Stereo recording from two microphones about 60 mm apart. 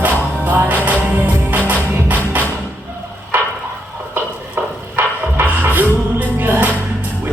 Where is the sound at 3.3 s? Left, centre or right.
Right.